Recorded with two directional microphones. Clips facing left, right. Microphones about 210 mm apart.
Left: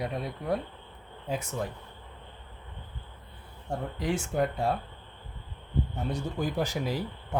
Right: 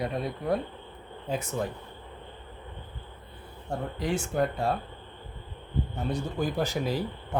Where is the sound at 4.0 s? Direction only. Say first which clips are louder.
Right 1 dB; 15° left (ahead or behind).